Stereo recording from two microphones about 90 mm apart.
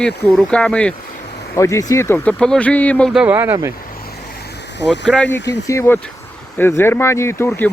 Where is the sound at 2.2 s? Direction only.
15° left (ahead or behind).